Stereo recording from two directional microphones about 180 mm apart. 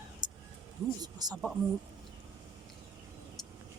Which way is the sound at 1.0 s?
20° right (ahead or behind).